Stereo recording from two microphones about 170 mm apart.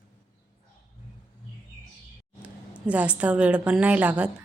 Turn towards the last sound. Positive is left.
turn(degrees=-10)  # may be behind; listen again after turning